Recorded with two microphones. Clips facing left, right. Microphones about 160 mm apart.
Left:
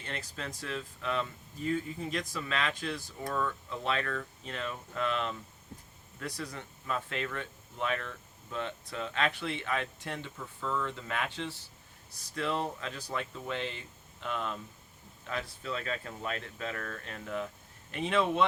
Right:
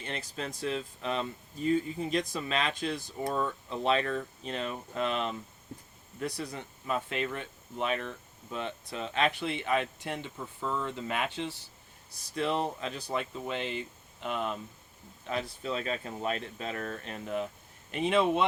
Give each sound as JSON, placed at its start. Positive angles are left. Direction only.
{"t": 0.0, "sound": "speech", "side_deg": -20}